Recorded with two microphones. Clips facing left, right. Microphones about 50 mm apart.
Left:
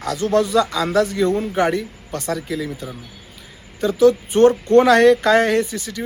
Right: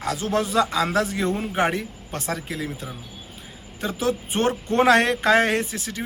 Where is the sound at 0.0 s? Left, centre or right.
Right.